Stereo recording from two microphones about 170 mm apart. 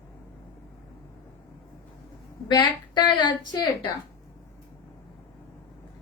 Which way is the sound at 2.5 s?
25° left (ahead or behind).